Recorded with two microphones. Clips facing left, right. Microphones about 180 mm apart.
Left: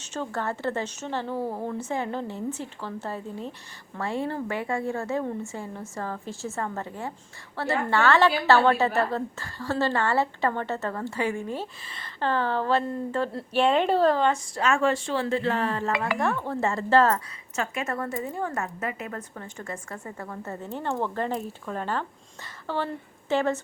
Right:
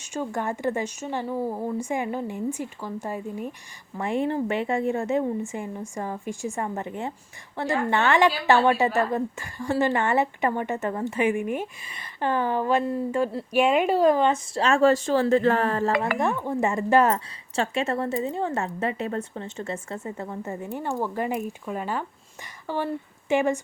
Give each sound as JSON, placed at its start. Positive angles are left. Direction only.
{"t": 0.0, "sound": "a woman's voice", "side_deg": -10}
{"t": 14.6, "sound": "speech", "side_deg": -35}
{"t": 16.1, "sound": "a woman's voice", "side_deg": -15}
{"t": 17.5, "sound": "a woman's voice", "side_deg": -30}